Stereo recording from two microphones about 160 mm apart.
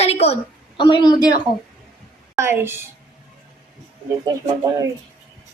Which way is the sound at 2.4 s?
15° right (ahead or behind).